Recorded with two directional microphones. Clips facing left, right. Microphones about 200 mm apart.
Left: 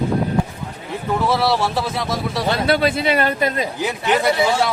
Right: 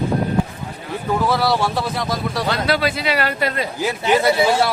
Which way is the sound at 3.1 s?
20° left (ahead or behind).